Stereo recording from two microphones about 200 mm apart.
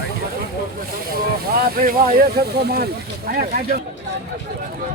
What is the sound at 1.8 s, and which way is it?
Speech, 45° right (ahead or behind).